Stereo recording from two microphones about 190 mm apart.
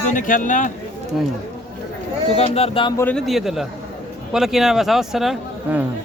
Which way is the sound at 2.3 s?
30° left (ahead or behind).